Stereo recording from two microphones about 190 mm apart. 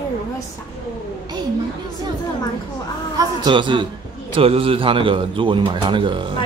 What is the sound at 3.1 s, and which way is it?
A man's voice, 20° right (ahead or behind).